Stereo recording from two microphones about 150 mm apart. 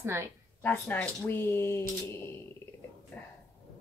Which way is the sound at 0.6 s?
15° left (ahead or behind).